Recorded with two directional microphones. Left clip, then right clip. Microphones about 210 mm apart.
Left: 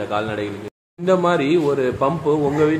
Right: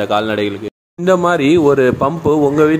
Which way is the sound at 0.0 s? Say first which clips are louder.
Right 7 dB; 40° right (ahead or behind).